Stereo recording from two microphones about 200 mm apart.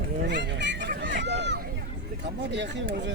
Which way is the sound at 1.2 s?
60° right (ahead or behind).